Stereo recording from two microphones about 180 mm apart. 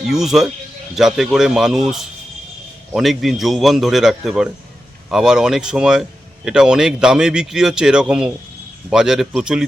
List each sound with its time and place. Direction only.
0.1 s speech: centre (ahead or behind)